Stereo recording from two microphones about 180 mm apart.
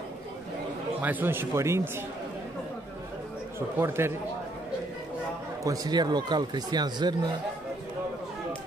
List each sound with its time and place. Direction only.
1.0 s speech: 10° right (ahead or behind)
3.5 s speech: 15° right (ahead or behind)
5.6 s speech: 20° right (ahead or behind)